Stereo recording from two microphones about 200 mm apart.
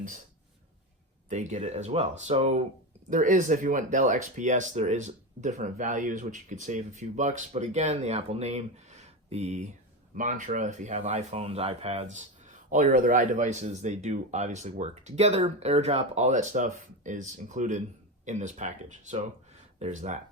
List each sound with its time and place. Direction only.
1.3 s speech: 35° right (ahead or behind)